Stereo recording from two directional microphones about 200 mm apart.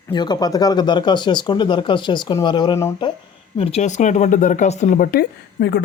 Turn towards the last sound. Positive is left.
turn(degrees=55)  # may be behind; listen again after turning